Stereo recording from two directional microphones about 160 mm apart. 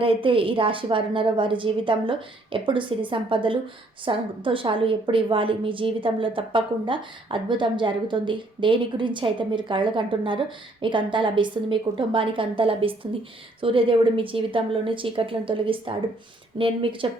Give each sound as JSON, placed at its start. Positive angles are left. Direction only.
{"t": 0.0, "sound": "a woman's voice", "side_deg": -35}